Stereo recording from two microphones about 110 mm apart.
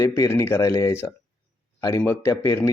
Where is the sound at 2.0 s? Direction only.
20° left (ahead or behind).